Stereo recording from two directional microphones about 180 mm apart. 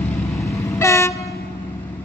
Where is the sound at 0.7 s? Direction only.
15° left (ahead or behind).